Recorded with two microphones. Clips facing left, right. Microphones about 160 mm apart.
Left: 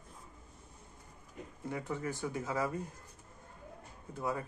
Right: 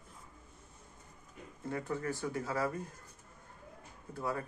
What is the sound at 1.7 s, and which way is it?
Speech, 15° left (ahead or behind).